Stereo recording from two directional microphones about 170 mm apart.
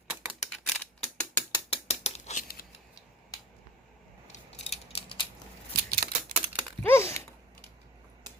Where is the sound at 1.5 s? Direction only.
35° left (ahead or behind).